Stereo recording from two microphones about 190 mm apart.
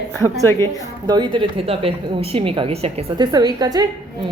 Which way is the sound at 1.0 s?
25° right (ahead or behind).